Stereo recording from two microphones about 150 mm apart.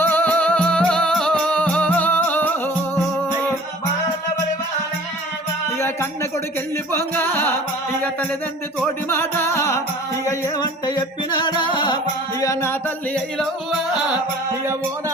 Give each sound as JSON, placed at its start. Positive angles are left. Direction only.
{"t": 0.0, "sound": "music", "side_deg": 10}
{"t": 6.9, "sound": "music", "side_deg": 15}
{"t": 9.0, "sound": "music", "side_deg": 15}
{"t": 12.4, "sound": "music", "side_deg": 20}
{"t": 13.1, "sound": "music", "side_deg": 0}